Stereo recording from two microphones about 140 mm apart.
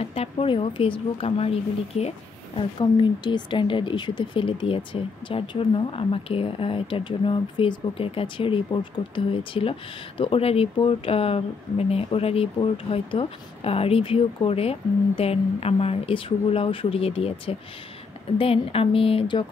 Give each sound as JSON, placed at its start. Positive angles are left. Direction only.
{"t": 0.0, "sound": "speech", "side_deg": 45}
{"t": 2.8, "sound": "speech", "side_deg": 35}